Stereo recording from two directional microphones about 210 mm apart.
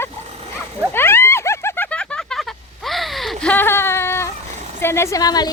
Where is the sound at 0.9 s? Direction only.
10° left (ahead or behind).